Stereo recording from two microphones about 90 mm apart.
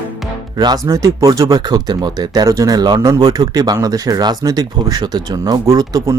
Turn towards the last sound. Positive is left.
turn(degrees=-40)  # may be behind; listen again after turning